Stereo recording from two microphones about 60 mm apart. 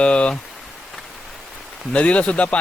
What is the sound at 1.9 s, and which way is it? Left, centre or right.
Speech, left.